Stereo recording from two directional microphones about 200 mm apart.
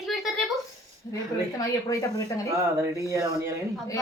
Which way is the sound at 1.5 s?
15° left (ahead or behind).